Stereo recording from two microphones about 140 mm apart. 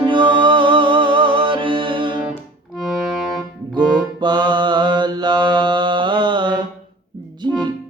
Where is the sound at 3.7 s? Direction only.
30° right (ahead or behind).